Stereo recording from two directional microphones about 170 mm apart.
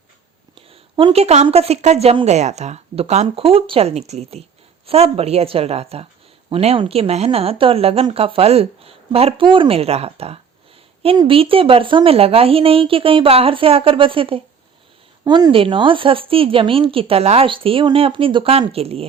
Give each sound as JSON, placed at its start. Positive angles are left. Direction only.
{"t": 0.5, "sound": "speech", "side_deg": -30}